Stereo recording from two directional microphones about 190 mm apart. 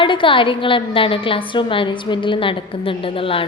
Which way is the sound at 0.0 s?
25° left (ahead or behind).